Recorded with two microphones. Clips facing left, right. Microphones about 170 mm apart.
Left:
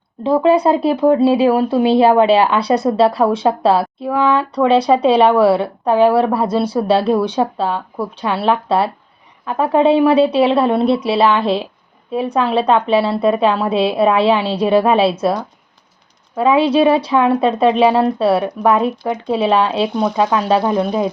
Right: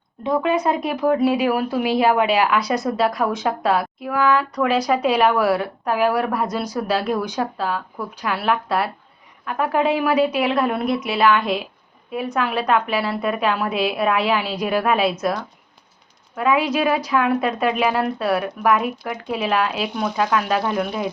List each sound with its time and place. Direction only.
0.2 s a woman's voice: 30° left (ahead or behind)